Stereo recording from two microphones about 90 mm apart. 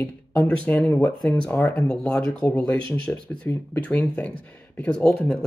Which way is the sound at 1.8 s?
10° left (ahead or behind).